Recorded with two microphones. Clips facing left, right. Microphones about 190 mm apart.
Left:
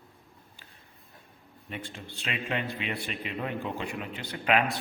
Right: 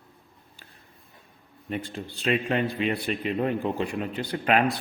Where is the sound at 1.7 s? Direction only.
40° right (ahead or behind).